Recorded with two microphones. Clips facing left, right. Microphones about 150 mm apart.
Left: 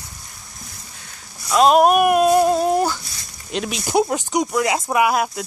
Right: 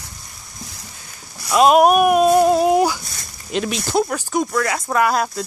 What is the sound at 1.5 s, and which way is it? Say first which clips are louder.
Speech: right 1 dB; 5° right (ahead or behind).